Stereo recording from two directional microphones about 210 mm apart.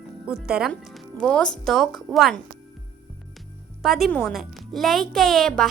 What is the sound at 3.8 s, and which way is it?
A woman's voice, centre (ahead or behind).